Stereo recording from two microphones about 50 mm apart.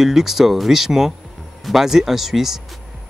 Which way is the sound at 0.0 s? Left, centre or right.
Centre.